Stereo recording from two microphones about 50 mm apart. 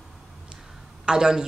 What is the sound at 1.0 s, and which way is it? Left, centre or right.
Speech, centre.